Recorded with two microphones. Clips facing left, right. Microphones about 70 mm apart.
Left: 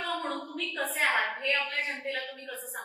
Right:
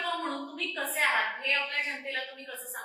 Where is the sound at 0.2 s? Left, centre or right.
Centre.